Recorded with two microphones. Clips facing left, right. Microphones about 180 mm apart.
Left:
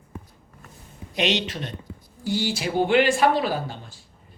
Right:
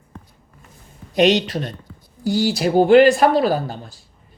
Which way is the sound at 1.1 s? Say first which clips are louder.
Right 9 dB; 40° right (ahead or behind).